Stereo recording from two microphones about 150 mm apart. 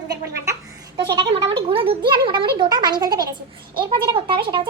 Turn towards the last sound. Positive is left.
turn(degrees=-35)  # may be behind; listen again after turning